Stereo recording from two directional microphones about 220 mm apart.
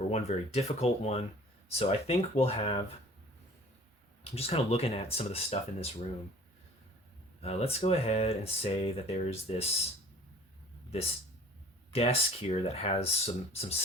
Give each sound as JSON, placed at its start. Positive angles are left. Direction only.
{"t": 0.1, "sound": "speech", "side_deg": 30}
{"t": 4.2, "sound": "speech", "side_deg": 25}
{"t": 7.4, "sound": "speech", "side_deg": 30}
{"t": 11.9, "sound": "speech", "side_deg": 25}